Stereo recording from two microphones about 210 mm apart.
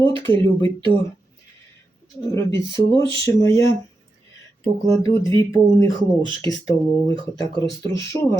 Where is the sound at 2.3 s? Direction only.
15° left (ahead or behind).